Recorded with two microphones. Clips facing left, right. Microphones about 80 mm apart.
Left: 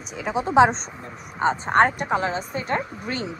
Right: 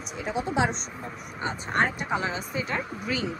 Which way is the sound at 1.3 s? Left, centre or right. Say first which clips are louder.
Left 10 dB; left.